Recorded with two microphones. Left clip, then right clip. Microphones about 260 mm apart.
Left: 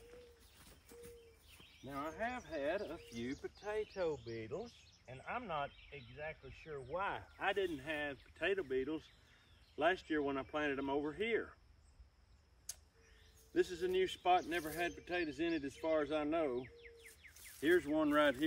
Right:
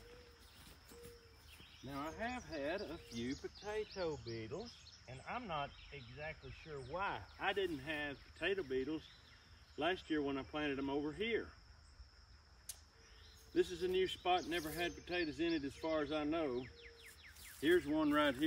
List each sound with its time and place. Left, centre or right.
1.9 s speech: centre
13.5 s speech: centre
16.6 s a sound: left
17.6 s speech: centre